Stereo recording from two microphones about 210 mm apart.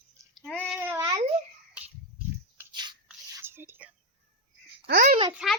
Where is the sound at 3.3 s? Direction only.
10° right (ahead or behind).